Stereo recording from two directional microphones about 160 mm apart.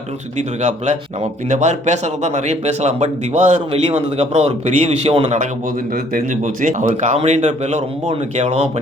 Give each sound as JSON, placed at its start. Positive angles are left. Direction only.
{"t": 0.3, "sound": "speech", "side_deg": -45}
{"t": 6.1, "sound": "speech", "side_deg": -55}